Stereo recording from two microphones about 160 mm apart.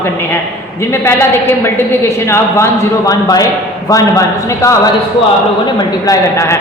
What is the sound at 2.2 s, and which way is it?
A man's voice, 15° left (ahead or behind).